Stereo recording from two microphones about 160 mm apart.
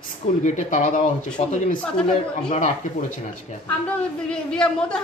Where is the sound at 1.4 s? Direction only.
40° left (ahead or behind).